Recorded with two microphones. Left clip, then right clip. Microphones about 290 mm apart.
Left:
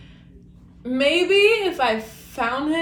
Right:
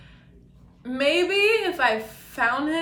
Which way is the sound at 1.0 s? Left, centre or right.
Centre.